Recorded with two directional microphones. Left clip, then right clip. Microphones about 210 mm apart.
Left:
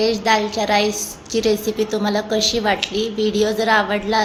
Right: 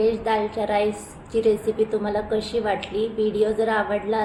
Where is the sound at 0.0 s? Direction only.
25° left (ahead or behind).